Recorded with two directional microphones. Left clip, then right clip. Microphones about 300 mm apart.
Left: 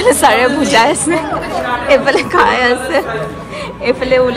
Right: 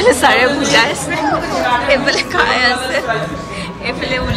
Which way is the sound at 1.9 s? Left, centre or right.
Centre.